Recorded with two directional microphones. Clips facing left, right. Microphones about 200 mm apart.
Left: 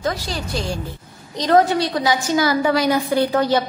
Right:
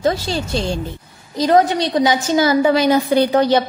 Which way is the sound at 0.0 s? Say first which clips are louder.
Right 6 dB; 25° right (ahead or behind).